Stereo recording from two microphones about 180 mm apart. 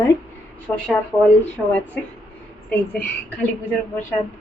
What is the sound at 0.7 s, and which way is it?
Speech, 15° left (ahead or behind).